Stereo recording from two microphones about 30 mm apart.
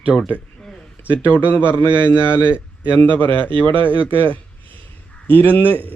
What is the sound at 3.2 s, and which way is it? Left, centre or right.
Speech, left.